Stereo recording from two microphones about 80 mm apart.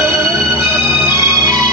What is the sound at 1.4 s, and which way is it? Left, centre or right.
Music, right.